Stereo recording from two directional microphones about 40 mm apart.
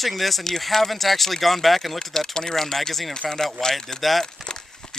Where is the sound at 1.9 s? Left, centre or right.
Centre.